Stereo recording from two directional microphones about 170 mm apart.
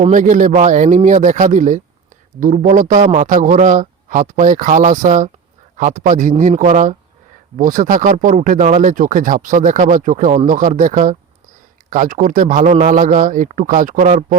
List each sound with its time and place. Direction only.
0.0 s speech: 50° right (ahead or behind)